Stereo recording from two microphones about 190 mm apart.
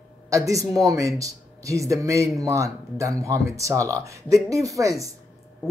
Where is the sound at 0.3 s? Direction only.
15° right (ahead or behind).